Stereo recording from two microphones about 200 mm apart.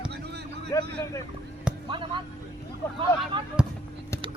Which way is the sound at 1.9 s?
25° right (ahead or behind).